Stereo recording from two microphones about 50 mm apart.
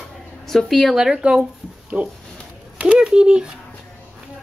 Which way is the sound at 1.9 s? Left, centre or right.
Right.